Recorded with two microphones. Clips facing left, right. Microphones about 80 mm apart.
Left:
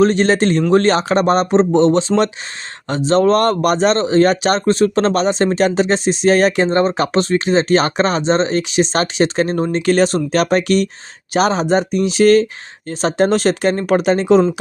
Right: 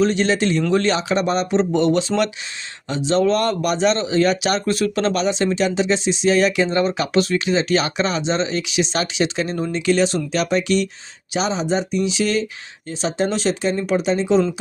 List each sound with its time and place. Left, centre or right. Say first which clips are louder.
0.0 s speech: left 5 dB; left
2.9 s speech: left 5 dB; left